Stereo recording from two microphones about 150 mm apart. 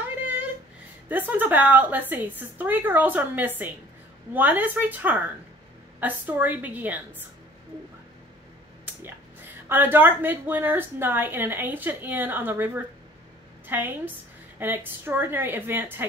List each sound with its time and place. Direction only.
1.0 s a woman's voice: 10° right (ahead or behind)
8.8 s a woman's voice: 15° right (ahead or behind)